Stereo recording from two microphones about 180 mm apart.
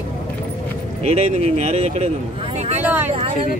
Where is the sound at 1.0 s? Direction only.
40° right (ahead or behind).